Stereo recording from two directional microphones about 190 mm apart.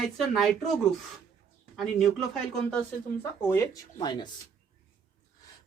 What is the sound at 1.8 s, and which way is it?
Speech, centre (ahead or behind).